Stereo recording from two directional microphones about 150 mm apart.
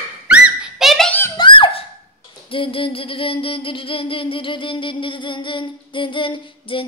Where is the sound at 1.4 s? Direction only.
35° left (ahead or behind).